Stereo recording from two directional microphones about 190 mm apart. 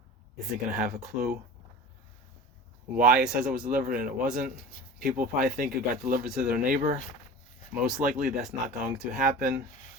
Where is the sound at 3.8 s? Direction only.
50° right (ahead or behind).